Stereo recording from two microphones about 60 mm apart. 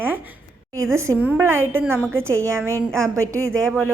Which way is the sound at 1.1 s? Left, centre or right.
Right.